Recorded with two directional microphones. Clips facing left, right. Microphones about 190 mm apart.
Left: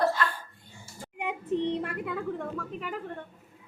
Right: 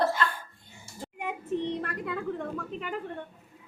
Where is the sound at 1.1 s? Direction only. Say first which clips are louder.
Left 2 dB; 15° left (ahead or behind).